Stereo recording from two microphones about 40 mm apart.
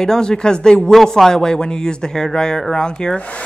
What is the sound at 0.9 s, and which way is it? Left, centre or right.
A man's voice, centre.